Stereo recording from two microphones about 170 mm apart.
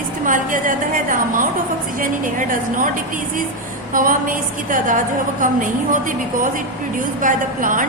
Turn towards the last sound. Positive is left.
turn(degrees=-50)  # may be behind; listen again after turning